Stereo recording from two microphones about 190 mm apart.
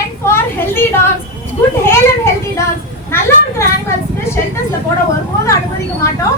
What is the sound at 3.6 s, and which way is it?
Speech, 15° left (ahead or behind).